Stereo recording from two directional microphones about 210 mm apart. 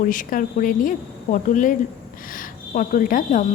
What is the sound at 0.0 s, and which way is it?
Speech, 40° left (ahead or behind).